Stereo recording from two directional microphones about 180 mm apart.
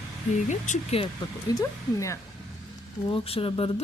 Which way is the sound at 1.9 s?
15° left (ahead or behind).